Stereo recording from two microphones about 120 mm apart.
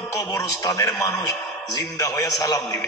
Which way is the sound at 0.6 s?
25° left (ahead or behind).